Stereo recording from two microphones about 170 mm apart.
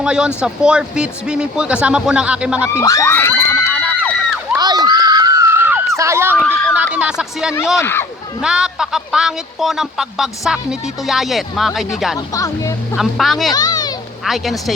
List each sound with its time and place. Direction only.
0.0 s speech: 5° right (ahead or behind)
2.8 s children shouting: 15° left (ahead or behind)
4.5 s a sound: 25° right (ahead or behind)
6.4 s a sound: 10° left (ahead or behind)
6.9 s speech: 5° right (ahead or behind)
7.8 s speech: 15° left (ahead or behind)
8.4 s speech: 5° right (ahead or behind)
12.1 s speech: 20° left (ahead or behind)
13.0 s speech: centre (ahead or behind)
13.5 s a sound: 25° left (ahead or behind)
14.3 s speech: centre (ahead or behind)